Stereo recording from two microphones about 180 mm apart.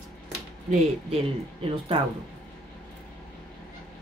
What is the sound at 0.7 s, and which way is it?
Speech, 30° right (ahead or behind).